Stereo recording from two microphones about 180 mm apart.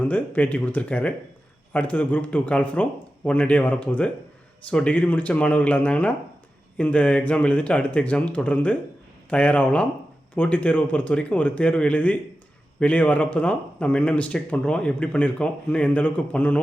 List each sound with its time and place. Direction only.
0.0 s speech: 10° left (ahead or behind)